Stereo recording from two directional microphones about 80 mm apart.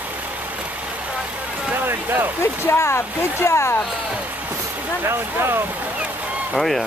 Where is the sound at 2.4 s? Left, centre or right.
Left.